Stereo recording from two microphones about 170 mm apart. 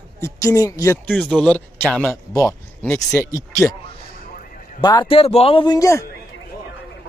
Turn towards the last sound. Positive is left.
turn(degrees=20)  # may be behind; listen again after turning